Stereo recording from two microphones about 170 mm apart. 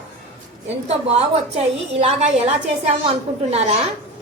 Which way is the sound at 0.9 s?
40° right (ahead or behind).